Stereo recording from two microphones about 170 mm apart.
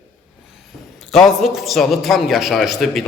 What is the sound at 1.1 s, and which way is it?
A man's voice, centre (ahead or behind).